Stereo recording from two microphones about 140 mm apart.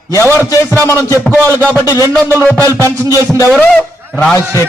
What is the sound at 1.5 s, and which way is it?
Speech, 15° right (ahead or behind).